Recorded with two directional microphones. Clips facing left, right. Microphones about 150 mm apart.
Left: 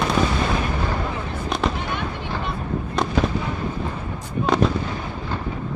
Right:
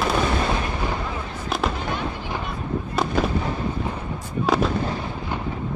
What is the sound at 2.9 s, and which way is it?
Fireworks, centre (ahead or behind).